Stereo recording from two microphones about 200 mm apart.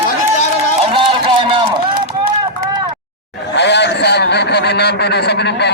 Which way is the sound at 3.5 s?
60° left (ahead or behind).